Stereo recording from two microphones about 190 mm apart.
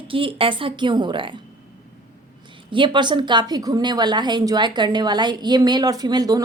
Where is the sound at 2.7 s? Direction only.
25° right (ahead or behind).